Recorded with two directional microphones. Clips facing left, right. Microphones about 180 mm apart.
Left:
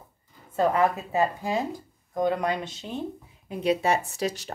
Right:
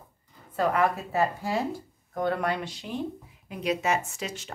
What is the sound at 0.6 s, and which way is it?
A woman's voice, 20° left (ahead or behind).